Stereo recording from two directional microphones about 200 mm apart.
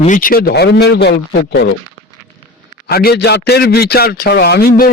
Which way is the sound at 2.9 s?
50° left (ahead or behind).